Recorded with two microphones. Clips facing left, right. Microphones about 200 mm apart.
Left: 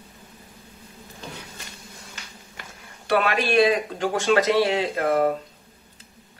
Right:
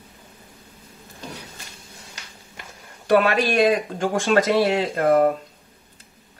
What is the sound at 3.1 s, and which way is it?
Speech, 45° right (ahead or behind).